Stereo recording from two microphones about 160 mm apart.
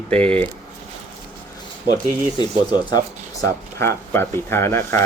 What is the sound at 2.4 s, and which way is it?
Speech, 25° left (ahead or behind).